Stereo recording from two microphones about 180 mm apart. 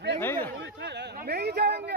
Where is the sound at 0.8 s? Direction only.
65° right (ahead or behind).